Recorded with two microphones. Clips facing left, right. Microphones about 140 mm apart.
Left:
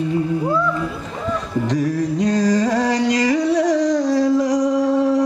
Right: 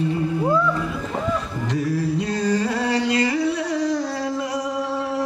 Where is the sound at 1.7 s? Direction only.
35° left (ahead or behind).